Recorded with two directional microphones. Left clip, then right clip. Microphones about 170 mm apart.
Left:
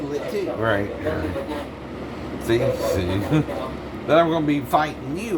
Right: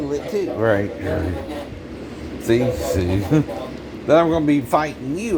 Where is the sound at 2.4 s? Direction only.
50° right (ahead or behind).